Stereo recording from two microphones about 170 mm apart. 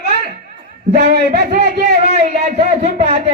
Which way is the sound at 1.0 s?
65° right (ahead or behind).